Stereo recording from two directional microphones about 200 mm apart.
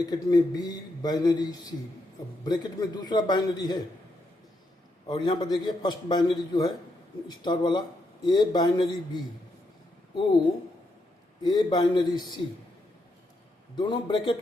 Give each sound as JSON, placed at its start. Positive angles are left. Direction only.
{"t": 0.0, "sound": "a man's voice", "side_deg": 20}
{"t": 5.0, "sound": "a man's voice", "side_deg": 25}
{"t": 11.4, "sound": "a man's voice", "side_deg": 20}
{"t": 13.7, "sound": "a man's voice", "side_deg": 25}